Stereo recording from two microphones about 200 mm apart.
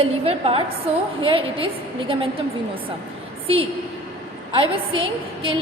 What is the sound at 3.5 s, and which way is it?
A woman's voice, 30° right (ahead or behind).